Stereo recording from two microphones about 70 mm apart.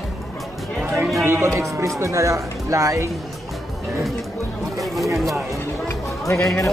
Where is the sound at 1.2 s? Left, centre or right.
Right.